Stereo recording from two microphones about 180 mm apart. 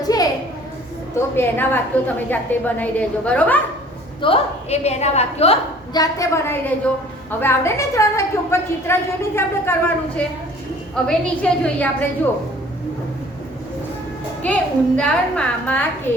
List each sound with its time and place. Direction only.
0.0 s a sound: 20° left (ahead or behind)
1.4 s a woman's voice: 10° left (ahead or behind)
4.2 s a woman's voice: 35° left (ahead or behind)
5.9 s a woman's voice: 20° left (ahead or behind)
10.9 s a woman's voice: 5° left (ahead or behind)
14.4 s a woman's voice: 5° left (ahead or behind)